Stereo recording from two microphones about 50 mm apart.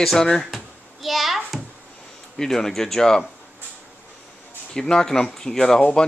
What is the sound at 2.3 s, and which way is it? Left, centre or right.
Speech, centre.